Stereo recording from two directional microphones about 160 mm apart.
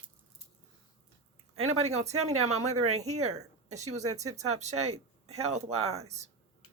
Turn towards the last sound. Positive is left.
turn(degrees=-45)  # may be behind; listen again after turning